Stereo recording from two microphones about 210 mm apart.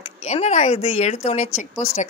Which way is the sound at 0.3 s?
35° left (ahead or behind).